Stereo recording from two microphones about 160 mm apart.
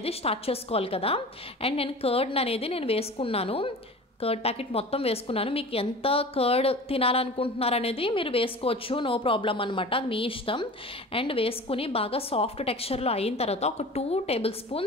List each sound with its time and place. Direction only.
0.0 s a woman's voice: 40° left (ahead or behind)